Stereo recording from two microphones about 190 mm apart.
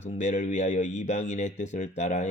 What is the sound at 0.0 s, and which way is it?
Speech, 40° left (ahead or behind).